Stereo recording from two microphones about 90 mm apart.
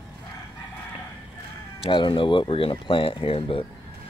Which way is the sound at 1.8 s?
65° left (ahead or behind).